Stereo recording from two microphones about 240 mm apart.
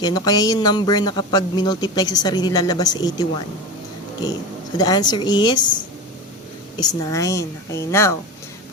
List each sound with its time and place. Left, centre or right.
0.0 s speech: centre
4.8 s speech: centre
6.7 s speech: centre